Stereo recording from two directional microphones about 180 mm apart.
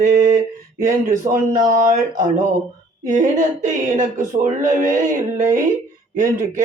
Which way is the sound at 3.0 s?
45° right (ahead or behind).